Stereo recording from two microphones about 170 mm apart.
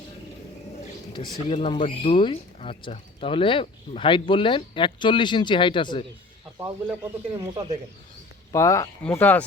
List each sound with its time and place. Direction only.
1.1 s speech: 25° left (ahead or behind)
6.8 s speech: 10° right (ahead or behind)
7.5 s speech: 25° right (ahead or behind)
8.5 s speech: 20° left (ahead or behind)